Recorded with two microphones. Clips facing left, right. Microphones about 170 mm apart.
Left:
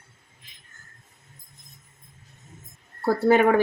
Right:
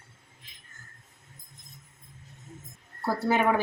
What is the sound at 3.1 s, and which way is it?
Speech, 55° left (ahead or behind).